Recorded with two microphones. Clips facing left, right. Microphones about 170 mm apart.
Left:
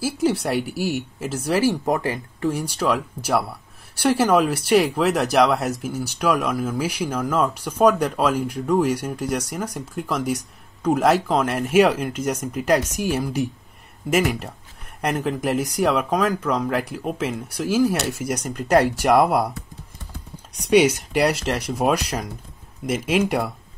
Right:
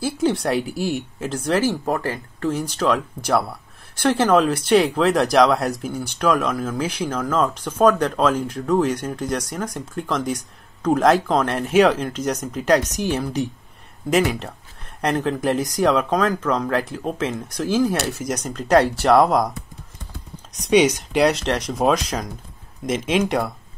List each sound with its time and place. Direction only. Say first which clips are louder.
0.0 s speech: right 1 dB; 5° left (ahead or behind)
20.6 s speech: even; 10° left (ahead or behind)